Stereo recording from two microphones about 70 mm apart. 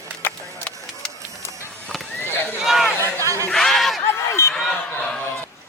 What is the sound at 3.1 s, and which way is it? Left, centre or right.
Speech, right.